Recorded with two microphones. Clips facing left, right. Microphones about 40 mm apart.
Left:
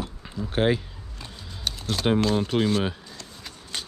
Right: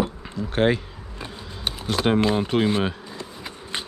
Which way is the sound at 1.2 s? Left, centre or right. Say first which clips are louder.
Right 5 dB; right.